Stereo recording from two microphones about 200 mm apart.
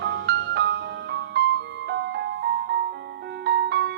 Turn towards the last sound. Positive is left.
turn(degrees=-55)  # may be behind; listen again after turning